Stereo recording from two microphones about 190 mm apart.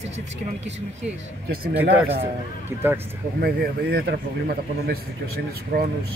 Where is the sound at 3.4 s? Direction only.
55° right (ahead or behind).